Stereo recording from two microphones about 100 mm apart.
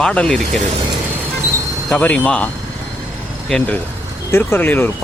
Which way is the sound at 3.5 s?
15° left (ahead or behind).